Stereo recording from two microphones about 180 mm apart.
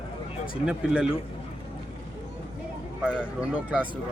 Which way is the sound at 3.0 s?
5° right (ahead or behind).